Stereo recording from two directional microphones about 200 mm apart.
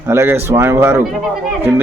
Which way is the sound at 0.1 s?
10° right (ahead or behind).